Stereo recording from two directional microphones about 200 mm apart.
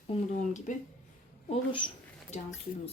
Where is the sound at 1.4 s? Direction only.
25° left (ahead or behind).